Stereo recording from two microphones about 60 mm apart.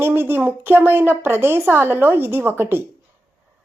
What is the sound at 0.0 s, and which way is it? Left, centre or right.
Speech, right.